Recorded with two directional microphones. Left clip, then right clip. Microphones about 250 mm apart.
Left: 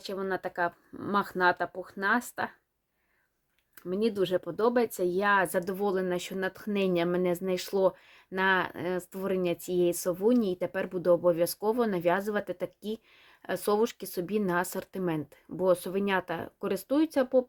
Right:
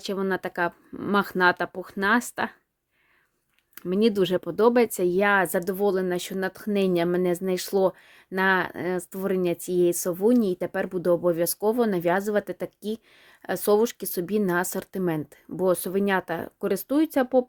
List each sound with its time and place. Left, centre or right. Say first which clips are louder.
0.0 s speech: right 5 dB; right
3.8 s speech: right 6 dB; right